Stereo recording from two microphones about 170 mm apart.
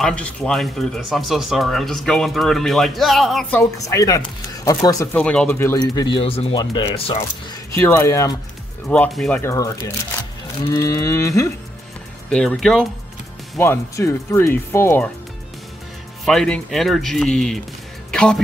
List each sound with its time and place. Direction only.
0.0 s speech: 5° left (ahead or behind)
5.1 s speech: 5° left (ahead or behind)
5.8 s speech: 25° left (ahead or behind)
7.7 s speech: 10° left (ahead or behind)
9.4 s speech: 15° left (ahead or behind)
12.3 s speech: 5° left (ahead or behind)
13.6 s speech: 15° left (ahead or behind)
16.3 s speech: 5° left (ahead or behind)
18.1 s music: 5° left (ahead or behind)